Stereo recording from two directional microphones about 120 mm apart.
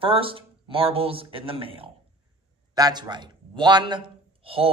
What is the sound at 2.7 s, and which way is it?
A man's voice, 35° right (ahead or behind).